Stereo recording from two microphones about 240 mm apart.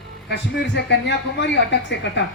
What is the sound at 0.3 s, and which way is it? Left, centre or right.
A man's voice, left.